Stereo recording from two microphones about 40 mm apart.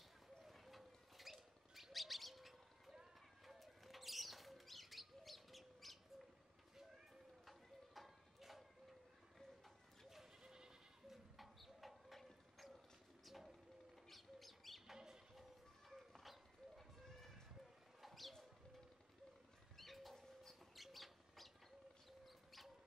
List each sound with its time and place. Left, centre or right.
0.4 s bird: centre
7.4 s horse: centre
10.0 s goat: centre
11.3 s clip-clop: centre
13.2 s bird: centre
15.0 s music: centre
15.9 s a sound: centre
18.0 s bird: centre
19.8 s bird: centre